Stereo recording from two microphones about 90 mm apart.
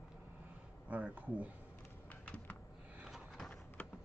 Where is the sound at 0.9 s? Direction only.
20° right (ahead or behind).